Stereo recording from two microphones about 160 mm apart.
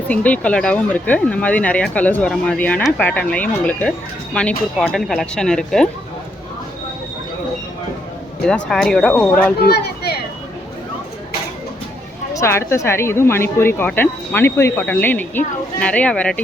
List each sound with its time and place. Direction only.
0.1 s speech: 10° left (ahead or behind)
8.4 s speech: 5° left (ahead or behind)
9.6 s speech: 90° left
12.3 s speech: 15° left (ahead or behind)